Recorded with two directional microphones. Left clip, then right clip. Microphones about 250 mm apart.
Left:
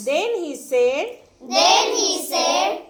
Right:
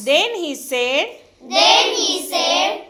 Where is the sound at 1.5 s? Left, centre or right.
Centre.